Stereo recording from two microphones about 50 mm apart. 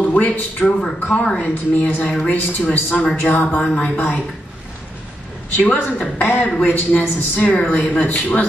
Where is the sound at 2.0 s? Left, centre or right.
Left.